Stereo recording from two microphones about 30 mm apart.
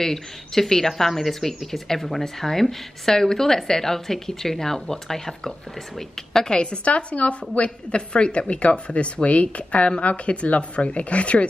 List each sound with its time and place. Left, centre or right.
0.0 s speech: centre
6.5 s a woman's voice: left
6.9 s a woman's voice: left